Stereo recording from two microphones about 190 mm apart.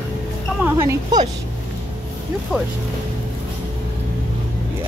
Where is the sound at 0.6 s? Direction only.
15° right (ahead or behind).